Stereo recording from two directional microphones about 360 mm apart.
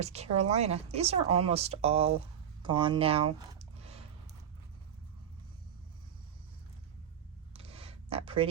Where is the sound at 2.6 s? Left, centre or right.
Centre.